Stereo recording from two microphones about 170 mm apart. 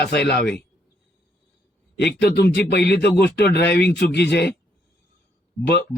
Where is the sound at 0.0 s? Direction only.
75° left (ahead or behind).